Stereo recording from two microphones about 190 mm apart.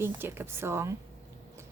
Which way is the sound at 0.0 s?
10° right (ahead or behind).